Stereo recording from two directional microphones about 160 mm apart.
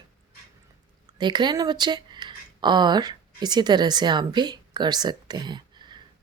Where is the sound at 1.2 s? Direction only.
30° right (ahead or behind).